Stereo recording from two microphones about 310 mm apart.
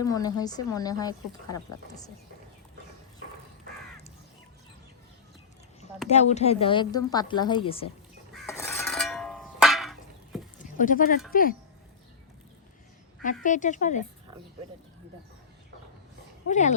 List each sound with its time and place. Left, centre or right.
0.0 s speech: centre
6.1 s speech: left
8.3 s crow: centre
10.6 s a sound: left
11.3 s speech: left
13.4 s speech: left
16.5 s speech: left